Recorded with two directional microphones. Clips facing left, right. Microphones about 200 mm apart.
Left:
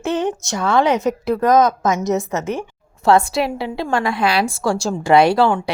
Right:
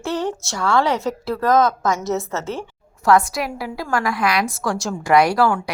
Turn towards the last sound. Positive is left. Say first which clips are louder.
# left 3 dB
turn(degrees=25)  # may be behind; listen again after turning